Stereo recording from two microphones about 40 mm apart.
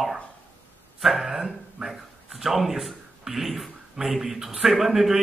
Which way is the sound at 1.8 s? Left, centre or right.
Centre.